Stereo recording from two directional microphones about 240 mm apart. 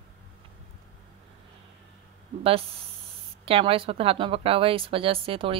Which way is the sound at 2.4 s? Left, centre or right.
Right.